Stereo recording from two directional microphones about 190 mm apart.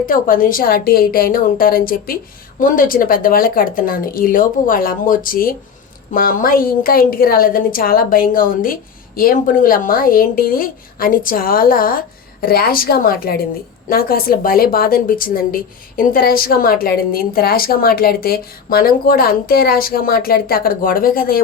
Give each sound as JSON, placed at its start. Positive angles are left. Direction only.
{"t": 0.0, "sound": "a woman's voice", "side_deg": 45}